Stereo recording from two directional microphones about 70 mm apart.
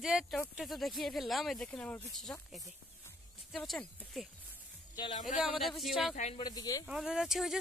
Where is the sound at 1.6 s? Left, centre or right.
Centre.